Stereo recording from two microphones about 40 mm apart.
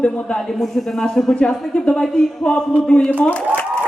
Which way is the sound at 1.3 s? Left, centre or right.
Left.